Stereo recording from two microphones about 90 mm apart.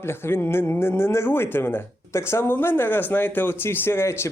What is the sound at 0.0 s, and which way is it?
Speech, 25° left (ahead or behind).